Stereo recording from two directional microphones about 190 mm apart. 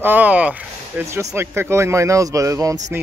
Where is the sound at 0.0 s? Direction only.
10° right (ahead or behind).